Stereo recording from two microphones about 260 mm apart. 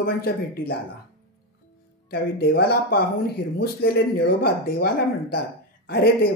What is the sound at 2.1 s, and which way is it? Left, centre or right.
Speech, left.